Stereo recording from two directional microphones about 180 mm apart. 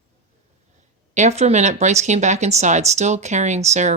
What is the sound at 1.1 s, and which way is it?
Speech, 40° right (ahead or behind).